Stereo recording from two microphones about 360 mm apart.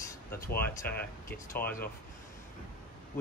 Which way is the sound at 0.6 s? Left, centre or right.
Centre.